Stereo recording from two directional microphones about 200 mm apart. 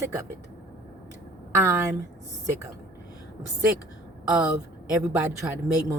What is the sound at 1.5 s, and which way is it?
Speech, 15° right (ahead or behind).